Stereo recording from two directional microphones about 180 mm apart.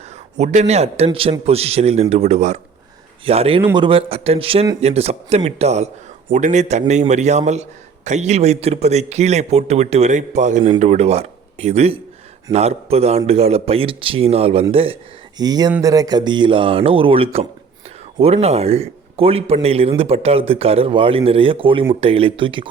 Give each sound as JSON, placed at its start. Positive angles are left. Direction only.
{"t": 0.3, "sound": "a man's voice", "side_deg": -40}